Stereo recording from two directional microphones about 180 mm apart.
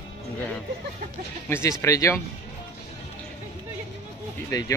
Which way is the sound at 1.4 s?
15° left (ahead or behind).